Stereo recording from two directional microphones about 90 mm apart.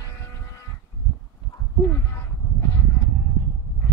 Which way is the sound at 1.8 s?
30° left (ahead or behind).